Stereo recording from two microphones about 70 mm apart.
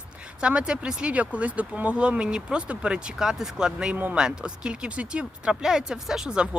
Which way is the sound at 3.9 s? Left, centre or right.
Right.